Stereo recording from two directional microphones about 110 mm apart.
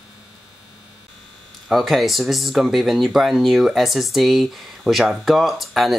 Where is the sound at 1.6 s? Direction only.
Centre (ahead or behind).